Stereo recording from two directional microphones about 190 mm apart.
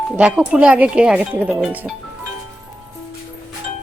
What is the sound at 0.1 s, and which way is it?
Speech, 5° right (ahead or behind).